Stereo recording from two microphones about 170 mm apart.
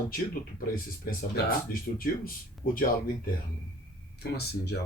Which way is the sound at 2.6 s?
55° left (ahead or behind).